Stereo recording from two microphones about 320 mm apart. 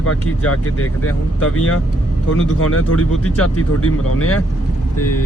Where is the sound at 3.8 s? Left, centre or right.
Left.